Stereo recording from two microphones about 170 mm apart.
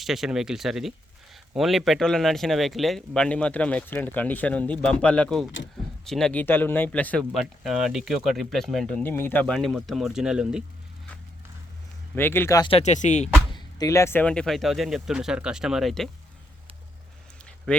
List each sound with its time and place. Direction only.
0.0 s speech: centre (ahead or behind)
12.1 s speech: 15° left (ahead or behind)
12.7 s speech: 45° left (ahead or behind)
13.5 s speech: 25° left (ahead or behind); by 16.0 s centre (ahead or behind)